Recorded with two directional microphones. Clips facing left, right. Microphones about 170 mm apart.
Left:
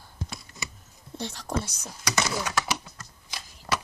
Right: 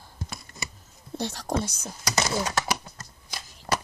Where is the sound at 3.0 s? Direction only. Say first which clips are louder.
Right 1 dB; 40° right (ahead or behind).